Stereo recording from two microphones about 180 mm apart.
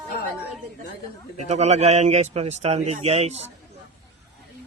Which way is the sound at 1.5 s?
40° right (ahead or behind).